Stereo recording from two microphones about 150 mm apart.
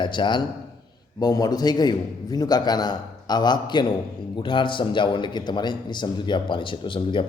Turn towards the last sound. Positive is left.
turn(degrees=35)  # may be behind; listen again after turning